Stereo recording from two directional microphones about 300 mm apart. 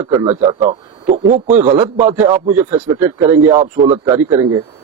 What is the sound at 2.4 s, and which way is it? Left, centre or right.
Speech, right.